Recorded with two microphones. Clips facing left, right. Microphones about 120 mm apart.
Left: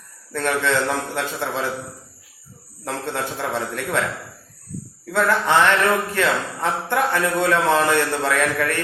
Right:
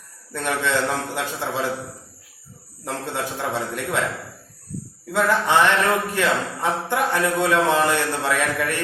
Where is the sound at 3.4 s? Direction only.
15° right (ahead or behind).